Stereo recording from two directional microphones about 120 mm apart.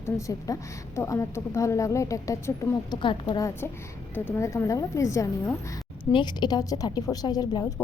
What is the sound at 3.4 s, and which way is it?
A woman's voice, 25° left (ahead or behind).